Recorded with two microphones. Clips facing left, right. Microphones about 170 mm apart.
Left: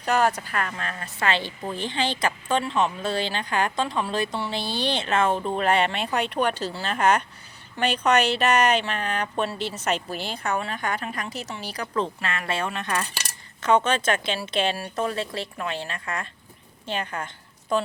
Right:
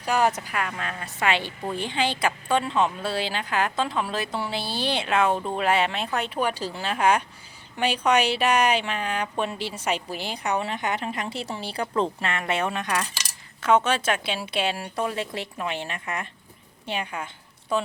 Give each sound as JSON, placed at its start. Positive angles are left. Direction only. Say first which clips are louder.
{"t": 0.0, "sound": "a woman's voice", "louder": "left 1 dB", "side_deg": -10}